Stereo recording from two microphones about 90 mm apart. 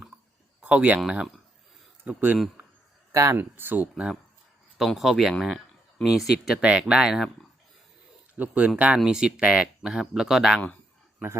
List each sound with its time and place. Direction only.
0.6 s speech: 15° right (ahead or behind)
3.1 s speech: 35° right (ahead or behind)
3.3 s speech: 20° right (ahead or behind)
4.8 s speech: centre (ahead or behind)
8.4 s speech: 15° right (ahead or behind)